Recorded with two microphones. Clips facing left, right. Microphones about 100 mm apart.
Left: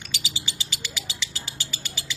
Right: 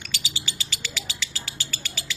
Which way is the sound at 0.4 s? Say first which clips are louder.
Even; 15° left (ahead or behind).